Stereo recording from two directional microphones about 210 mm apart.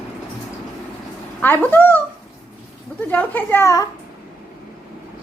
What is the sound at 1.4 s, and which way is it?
Speech, 10° left (ahead or behind).